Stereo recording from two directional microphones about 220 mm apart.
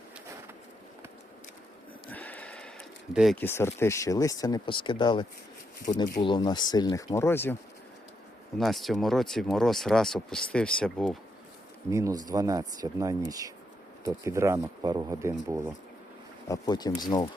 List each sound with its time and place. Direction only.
2.0 s bleat: 5° left (ahead or behind)
3.4 s speech: 10° left (ahead or behind)
6.2 s speech: 20° left (ahead or behind)
8.5 s speech: centre (ahead or behind)
11.9 s speech: 15° right (ahead or behind)
16.5 s speech: 20° left (ahead or behind)